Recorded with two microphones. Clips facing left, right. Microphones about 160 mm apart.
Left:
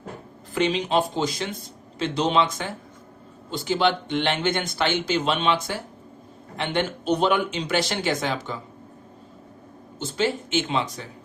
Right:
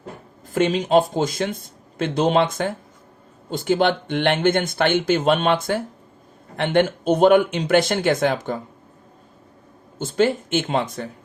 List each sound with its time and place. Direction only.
0.5 s speech: 45° right (ahead or behind)
10.0 s speech: 50° right (ahead or behind)